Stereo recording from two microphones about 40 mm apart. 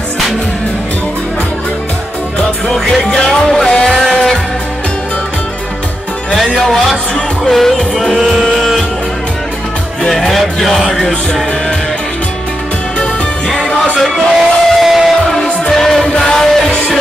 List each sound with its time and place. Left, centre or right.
2.3 s music: centre
6.3 s music: centre
10.0 s music: centre
13.9 s music: centre
15.7 s music: centre